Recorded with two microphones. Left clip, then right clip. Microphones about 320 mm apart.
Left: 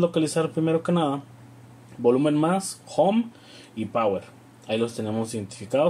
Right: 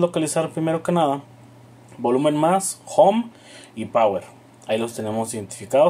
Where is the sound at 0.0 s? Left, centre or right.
Right.